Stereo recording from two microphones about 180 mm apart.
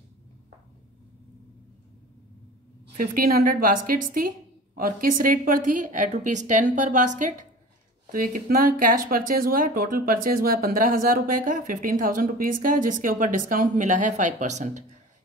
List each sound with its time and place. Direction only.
3.0 s speech: 55° right (ahead or behind)